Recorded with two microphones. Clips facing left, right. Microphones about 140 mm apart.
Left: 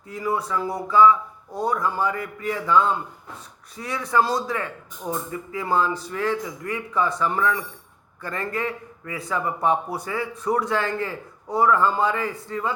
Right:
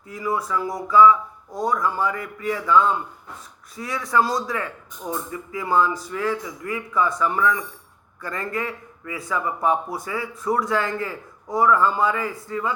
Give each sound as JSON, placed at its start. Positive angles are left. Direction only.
{"t": 0.1, "sound": "a man's voice", "side_deg": 35}